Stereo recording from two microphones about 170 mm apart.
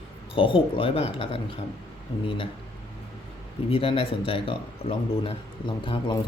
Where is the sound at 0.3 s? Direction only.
30° left (ahead or behind).